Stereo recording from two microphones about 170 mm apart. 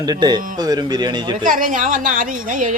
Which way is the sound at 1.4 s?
50° right (ahead or behind).